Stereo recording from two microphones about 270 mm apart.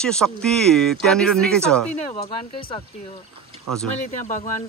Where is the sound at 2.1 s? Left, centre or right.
Left.